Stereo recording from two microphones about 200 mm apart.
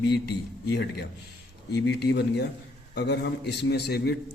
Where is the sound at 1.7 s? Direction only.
55° left (ahead or behind).